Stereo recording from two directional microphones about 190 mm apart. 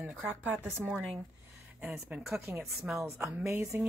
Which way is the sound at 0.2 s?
Centre (ahead or behind).